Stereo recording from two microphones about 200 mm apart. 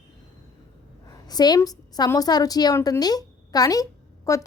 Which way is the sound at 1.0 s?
20° left (ahead or behind).